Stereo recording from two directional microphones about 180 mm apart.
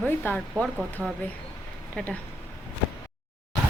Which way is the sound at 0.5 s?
10° right (ahead or behind).